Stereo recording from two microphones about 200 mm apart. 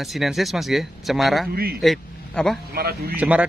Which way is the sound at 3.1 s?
5° right (ahead or behind).